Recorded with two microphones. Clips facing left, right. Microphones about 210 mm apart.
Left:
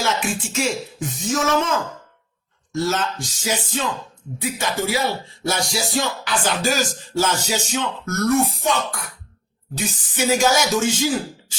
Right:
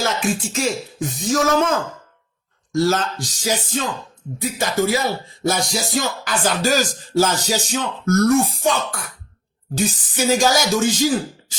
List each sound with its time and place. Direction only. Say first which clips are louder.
0.0 s music: right 2 dB; 35° right (ahead or behind)
2.7 s music: right 4 dB; 35° right (ahead or behind)
4.4 s speech: right 4 dB; 40° right (ahead or behind)
5.4 s music: right 3 dB; 45° right (ahead or behind)